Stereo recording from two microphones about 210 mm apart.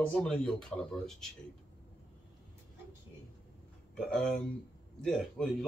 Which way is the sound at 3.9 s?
5° left (ahead or behind).